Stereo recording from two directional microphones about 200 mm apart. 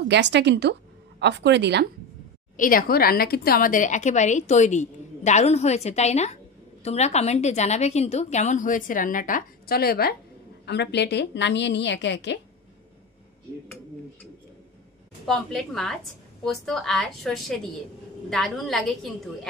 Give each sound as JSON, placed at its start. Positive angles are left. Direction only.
{"t": 0.1, "sound": "a woman's voice", "side_deg": -60}
{"t": 2.5, "sound": "a woman's voice", "side_deg": 45}
{"t": 15.2, "sound": "a woman's voice", "side_deg": 0}